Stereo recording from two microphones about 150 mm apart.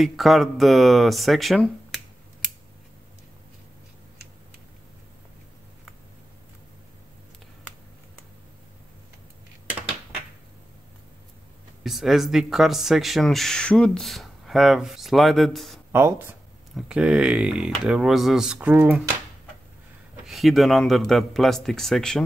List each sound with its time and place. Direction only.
0.0 s speech: centre (ahead or behind)
11.8 s speech: centre (ahead or behind)
15.9 s speech: 15° right (ahead or behind)
20.2 s speech: centre (ahead or behind)